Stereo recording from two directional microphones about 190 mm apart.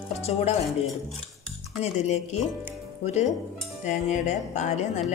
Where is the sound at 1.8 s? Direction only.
35° left (ahead or behind).